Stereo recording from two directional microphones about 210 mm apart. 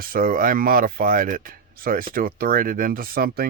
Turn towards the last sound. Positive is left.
turn(degrees=-45)  # may be behind; listen again after turning